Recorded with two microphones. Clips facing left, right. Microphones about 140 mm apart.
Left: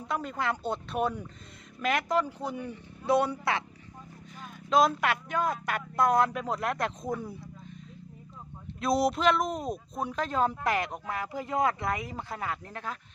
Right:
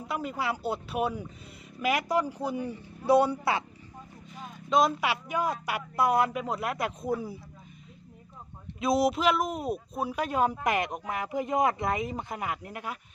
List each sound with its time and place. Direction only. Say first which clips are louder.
0.0 s speech: even; 5° right (ahead or behind)
3.2 s a man's voice: right 4 dB; 30° right (ahead or behind)
4.4 s speech: even; centre (ahead or behind)
8.8 s speech: right 1 dB; centre (ahead or behind)